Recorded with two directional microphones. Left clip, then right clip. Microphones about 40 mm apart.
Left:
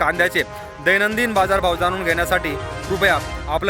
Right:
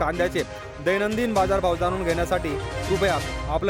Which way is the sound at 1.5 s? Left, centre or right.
Right.